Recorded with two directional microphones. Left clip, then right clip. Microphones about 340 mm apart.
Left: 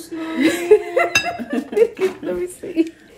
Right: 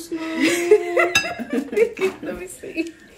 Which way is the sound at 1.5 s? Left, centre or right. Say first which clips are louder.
Left 3 dB; centre.